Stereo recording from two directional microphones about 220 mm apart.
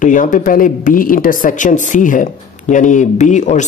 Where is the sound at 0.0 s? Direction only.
35° left (ahead or behind).